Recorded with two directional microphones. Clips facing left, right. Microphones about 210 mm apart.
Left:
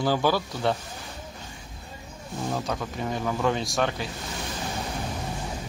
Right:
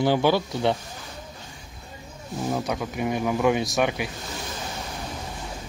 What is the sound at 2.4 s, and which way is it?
Speech, 10° right (ahead or behind).